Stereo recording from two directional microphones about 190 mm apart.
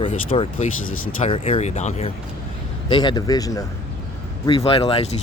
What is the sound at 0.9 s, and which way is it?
Speech, 90° left.